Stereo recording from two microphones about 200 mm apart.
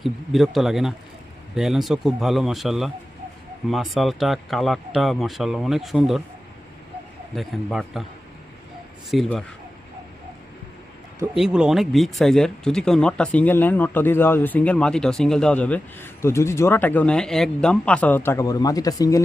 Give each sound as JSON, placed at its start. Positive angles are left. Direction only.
{"t": 0.0, "sound": "speech", "side_deg": 0}
{"t": 7.3, "sound": "speech", "side_deg": 0}
{"t": 9.0, "sound": "speech", "side_deg": 0}
{"t": 11.3, "sound": "speech", "side_deg": -5}